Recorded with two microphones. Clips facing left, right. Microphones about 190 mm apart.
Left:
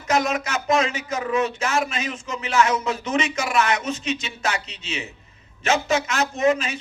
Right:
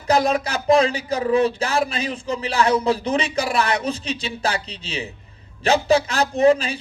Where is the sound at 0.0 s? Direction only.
35° right (ahead or behind).